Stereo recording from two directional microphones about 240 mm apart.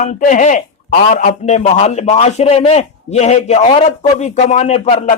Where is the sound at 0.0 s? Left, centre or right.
Left.